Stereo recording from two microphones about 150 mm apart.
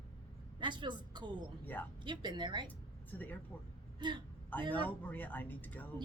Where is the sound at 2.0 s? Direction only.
30° right (ahead or behind).